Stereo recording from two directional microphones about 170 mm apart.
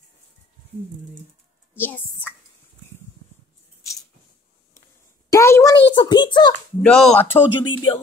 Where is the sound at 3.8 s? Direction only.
15° left (ahead or behind).